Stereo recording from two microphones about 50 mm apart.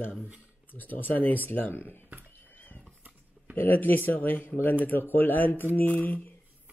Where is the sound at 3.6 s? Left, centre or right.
Left.